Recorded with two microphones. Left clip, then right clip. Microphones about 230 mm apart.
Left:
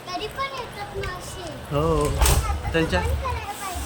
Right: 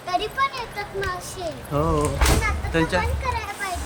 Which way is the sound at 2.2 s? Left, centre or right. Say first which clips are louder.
Right 2 dB; left.